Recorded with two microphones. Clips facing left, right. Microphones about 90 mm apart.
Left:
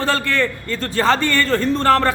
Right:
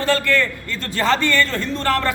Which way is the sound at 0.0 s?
30° left (ahead or behind).